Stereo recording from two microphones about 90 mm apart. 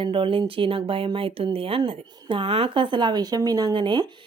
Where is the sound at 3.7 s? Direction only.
55° right (ahead or behind).